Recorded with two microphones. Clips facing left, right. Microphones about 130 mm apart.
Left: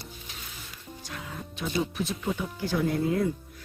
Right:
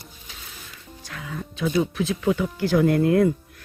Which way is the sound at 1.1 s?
90° right.